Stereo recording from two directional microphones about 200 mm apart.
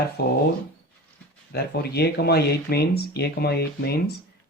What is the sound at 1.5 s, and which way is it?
Speech, 55° left (ahead or behind).